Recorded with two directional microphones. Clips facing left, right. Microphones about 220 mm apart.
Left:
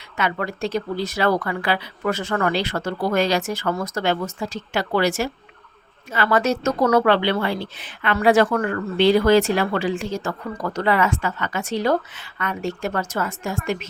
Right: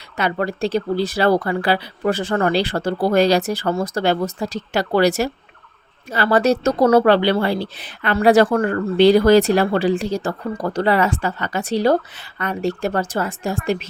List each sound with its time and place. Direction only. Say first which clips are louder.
0.2 s speech: right 4 dB; 35° right (ahead or behind)